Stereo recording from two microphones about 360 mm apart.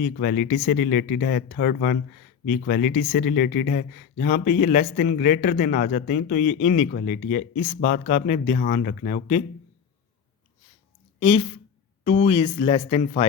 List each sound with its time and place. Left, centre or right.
0.0 s speech: left
11.2 s a woman's voice: centre